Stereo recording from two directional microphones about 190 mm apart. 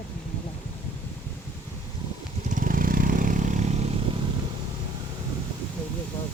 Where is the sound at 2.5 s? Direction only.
45° right (ahead or behind).